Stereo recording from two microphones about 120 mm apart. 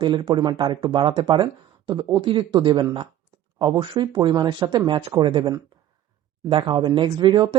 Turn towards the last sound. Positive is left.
turn(degrees=-40)  # may be behind; listen again after turning